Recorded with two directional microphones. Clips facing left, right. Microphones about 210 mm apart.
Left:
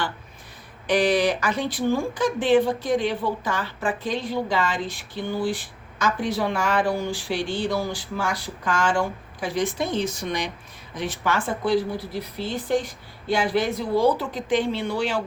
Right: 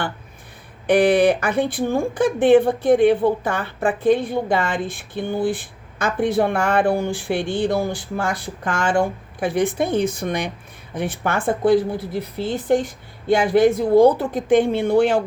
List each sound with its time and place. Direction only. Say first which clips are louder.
0.9 s a woman's voice: right 6 dB; 55° right (ahead or behind)